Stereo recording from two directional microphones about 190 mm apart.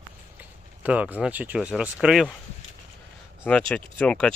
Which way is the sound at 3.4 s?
5° left (ahead or behind).